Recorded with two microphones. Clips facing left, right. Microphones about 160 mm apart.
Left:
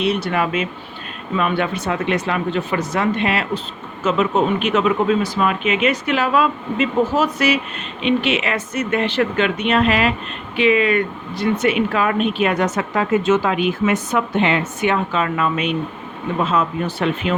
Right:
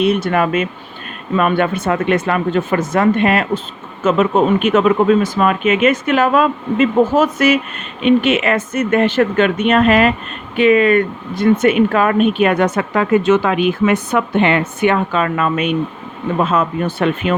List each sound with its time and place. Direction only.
0.0 s speech: 50° right (ahead or behind)